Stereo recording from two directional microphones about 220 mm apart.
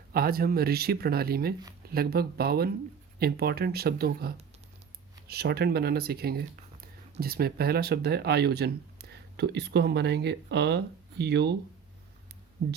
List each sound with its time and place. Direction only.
0.1 s speech: 45° right (ahead or behind)